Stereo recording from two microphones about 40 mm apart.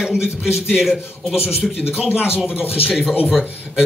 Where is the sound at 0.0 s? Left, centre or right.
Centre.